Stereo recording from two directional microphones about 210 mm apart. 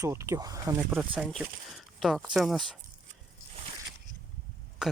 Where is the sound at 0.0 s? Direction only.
15° right (ahead or behind).